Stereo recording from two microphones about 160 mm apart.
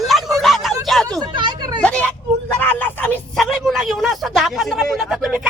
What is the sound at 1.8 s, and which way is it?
Speech, 10° left (ahead or behind).